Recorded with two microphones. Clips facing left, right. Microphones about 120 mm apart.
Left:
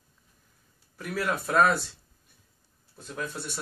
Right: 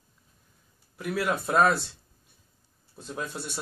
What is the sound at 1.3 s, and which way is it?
Speech, 25° right (ahead or behind).